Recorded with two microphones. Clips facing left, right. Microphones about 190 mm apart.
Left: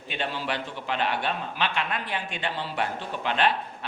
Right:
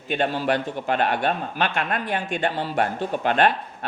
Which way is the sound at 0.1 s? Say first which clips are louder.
Right 8 dB; 50° right (ahead or behind).